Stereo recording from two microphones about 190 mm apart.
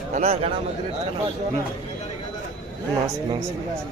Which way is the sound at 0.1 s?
35° right (ahead or behind).